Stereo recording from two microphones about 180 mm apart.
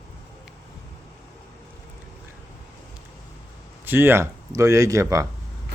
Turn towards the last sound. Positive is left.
turn(degrees=-20)  # may be behind; listen again after turning